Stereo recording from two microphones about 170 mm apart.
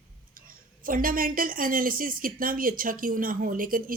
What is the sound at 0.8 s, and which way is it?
A woman's voice, 55° right (ahead or behind).